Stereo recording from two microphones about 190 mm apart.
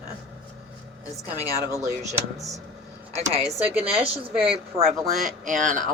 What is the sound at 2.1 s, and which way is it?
Speech, 15° right (ahead or behind).